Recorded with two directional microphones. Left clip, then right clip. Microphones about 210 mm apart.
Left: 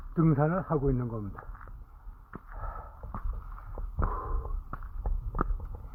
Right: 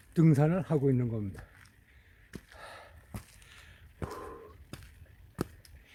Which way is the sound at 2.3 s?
25° right (ahead or behind).